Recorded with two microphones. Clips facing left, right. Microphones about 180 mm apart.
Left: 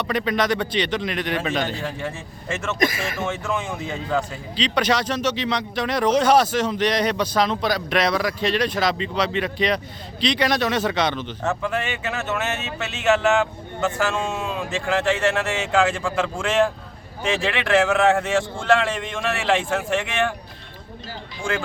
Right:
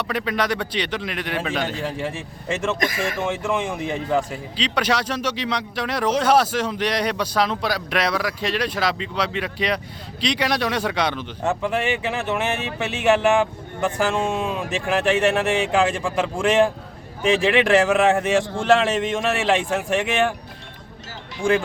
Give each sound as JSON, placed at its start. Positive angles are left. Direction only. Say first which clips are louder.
{"t": 0.0, "sound": "speech", "louder": "left 2 dB", "side_deg": -5}